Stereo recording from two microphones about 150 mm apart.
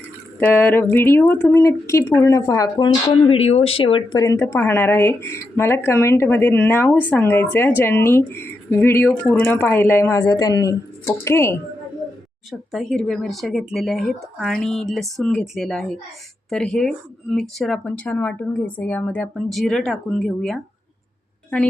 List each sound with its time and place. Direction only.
0.3 s speech: 10° left (ahead or behind); by 4.2 s 35° left (ahead or behind)
4.2 s speech: 20° left (ahead or behind)
12.5 s speech: centre (ahead or behind)